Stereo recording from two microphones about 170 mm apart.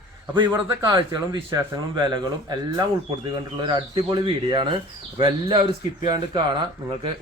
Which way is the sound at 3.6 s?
30° right (ahead or behind).